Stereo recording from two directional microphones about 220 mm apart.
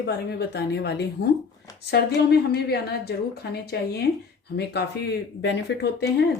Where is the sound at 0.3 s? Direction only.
50° left (ahead or behind).